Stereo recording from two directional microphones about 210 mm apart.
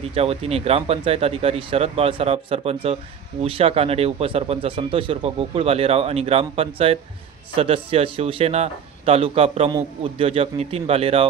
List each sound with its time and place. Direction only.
0.1 s a man's voice: 30° right (ahead or behind)